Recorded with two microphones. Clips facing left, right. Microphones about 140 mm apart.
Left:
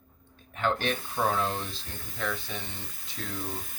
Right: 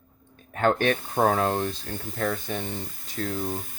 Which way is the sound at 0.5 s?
55° right (ahead or behind).